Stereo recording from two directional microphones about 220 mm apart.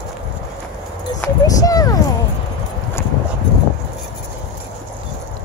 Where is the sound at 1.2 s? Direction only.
15° left (ahead or behind).